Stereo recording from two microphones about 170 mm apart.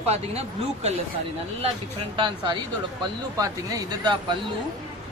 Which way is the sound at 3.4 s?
20° right (ahead or behind).